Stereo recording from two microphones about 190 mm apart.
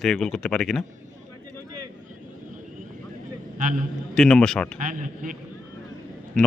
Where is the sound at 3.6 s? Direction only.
45° right (ahead or behind).